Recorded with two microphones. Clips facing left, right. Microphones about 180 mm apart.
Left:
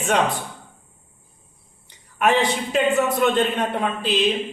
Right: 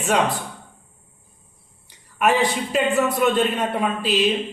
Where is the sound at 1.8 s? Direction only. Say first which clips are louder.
Even; 5° right (ahead or behind).